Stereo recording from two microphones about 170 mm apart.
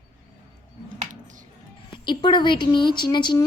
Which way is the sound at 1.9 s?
30° left (ahead or behind).